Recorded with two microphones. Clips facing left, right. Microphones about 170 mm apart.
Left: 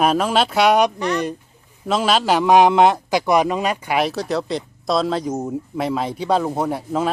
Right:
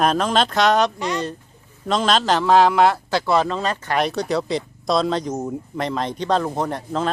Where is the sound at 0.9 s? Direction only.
15° right (ahead or behind).